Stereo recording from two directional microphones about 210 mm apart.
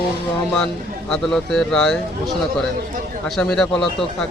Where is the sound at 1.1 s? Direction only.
5° left (ahead or behind).